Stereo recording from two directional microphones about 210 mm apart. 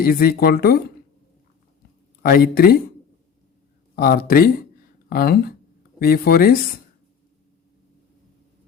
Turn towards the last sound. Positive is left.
turn(degrees=45)  # may be behind; listen again after turning